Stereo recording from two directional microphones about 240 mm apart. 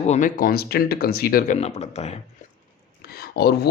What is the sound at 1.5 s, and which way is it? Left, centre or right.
Speech, left.